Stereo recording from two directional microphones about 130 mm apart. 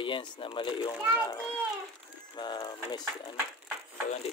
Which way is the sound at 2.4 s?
35° left (ahead or behind).